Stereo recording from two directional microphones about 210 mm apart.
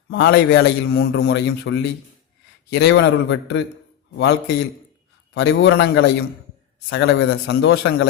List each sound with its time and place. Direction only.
0.1 s a man's voice: 55° left (ahead or behind)